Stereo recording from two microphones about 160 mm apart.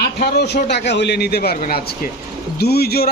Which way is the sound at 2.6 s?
80° left.